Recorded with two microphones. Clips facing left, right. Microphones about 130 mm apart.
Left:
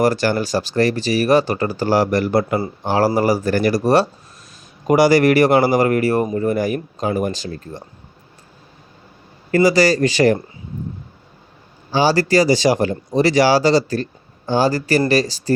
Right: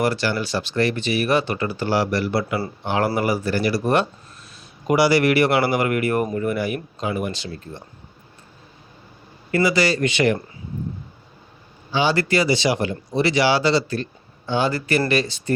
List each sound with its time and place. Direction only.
0.0 s speech: 45° left (ahead or behind)
9.5 s speech: 40° left (ahead or behind)
11.9 s speech: 40° left (ahead or behind)